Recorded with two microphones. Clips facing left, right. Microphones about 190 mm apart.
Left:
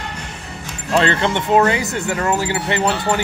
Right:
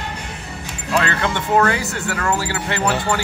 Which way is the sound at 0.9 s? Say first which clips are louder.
Left 4 dB; 25° left (ahead or behind).